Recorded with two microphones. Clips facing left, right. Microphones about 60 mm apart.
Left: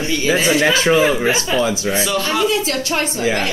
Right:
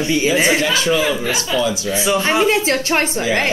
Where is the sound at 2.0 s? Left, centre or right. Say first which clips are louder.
Right 5 dB; right.